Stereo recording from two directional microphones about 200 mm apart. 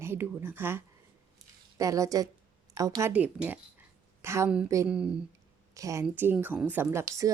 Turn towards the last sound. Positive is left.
turn(degrees=-15)  # may be behind; listen again after turning